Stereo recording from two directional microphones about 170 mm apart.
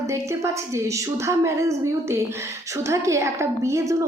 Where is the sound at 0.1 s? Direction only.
15° right (ahead or behind).